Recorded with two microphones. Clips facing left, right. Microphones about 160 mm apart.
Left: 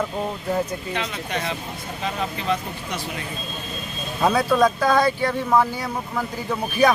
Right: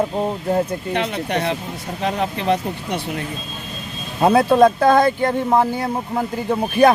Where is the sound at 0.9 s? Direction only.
60° right (ahead or behind).